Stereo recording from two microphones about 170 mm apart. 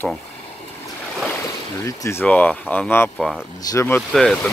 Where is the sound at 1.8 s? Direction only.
15° left (ahead or behind).